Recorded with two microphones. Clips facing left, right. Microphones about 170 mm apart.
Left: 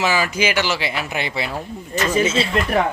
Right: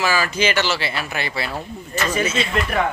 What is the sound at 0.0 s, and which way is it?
Speech, 20° left (ahead or behind).